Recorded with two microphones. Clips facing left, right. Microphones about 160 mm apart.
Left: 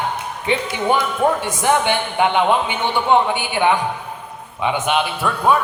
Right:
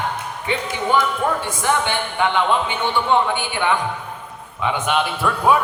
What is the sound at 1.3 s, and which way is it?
A man's voice, 15° left (ahead or behind).